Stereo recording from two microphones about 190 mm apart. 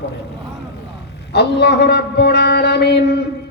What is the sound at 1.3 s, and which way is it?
Speech, 60° left (ahead or behind).